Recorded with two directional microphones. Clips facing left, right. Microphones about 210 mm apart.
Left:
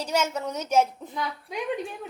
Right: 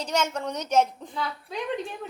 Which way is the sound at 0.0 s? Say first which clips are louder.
Left 1 dB; 5° left (ahead or behind).